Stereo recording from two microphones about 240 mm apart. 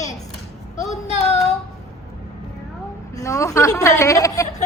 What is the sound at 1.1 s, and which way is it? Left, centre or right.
Child singing, left.